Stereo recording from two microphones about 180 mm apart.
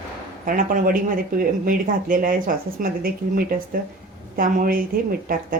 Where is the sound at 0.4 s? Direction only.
50° right (ahead or behind).